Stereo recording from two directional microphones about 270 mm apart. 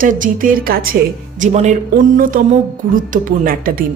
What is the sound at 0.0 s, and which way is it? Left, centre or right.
A woman's voice, right.